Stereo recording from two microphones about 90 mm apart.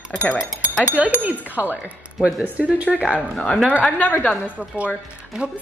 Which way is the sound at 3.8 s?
20° left (ahead or behind).